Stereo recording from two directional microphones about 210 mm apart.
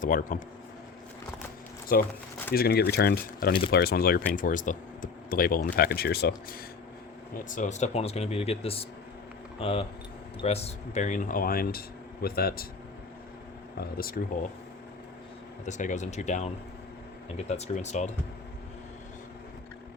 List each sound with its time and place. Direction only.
0.0 s speech: 40° left (ahead or behind)
1.9 s speech: 45° left (ahead or behind)
7.5 s speech: 35° left (ahead or behind)
13.9 s speech: 45° left (ahead or behind)
15.6 s speech: 35° left (ahead or behind)